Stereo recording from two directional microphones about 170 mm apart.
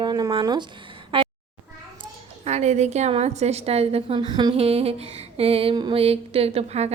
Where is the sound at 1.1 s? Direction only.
30° right (ahead or behind).